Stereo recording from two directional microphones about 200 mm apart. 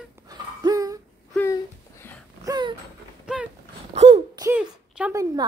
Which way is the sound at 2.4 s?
20° right (ahead or behind).